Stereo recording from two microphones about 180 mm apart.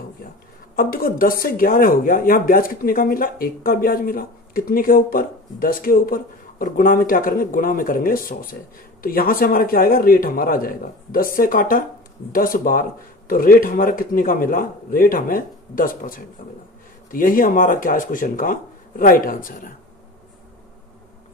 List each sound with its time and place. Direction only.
0.7 s speech: 55° left (ahead or behind)